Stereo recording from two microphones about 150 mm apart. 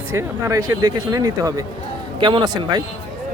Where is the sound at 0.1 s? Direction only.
20° right (ahead or behind).